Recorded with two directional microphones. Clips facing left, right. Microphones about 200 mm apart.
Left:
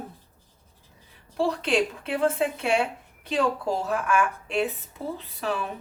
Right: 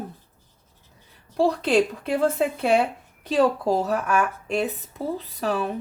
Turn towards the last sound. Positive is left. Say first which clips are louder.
# right 4 dB
turn(degrees=-40)  # may be behind; listen again after turning